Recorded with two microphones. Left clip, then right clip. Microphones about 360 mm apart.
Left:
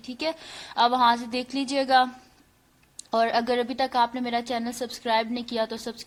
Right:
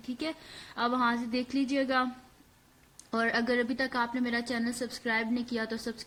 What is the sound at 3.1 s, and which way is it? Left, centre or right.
A woman's voice, centre.